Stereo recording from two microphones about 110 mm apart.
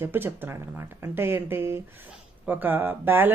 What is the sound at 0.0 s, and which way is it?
Speech, 20° right (ahead or behind).